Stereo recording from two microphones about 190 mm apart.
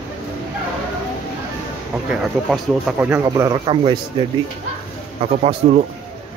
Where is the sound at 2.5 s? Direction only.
5° right (ahead or behind).